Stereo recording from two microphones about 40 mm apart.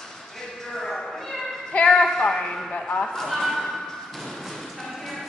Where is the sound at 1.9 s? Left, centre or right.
Centre.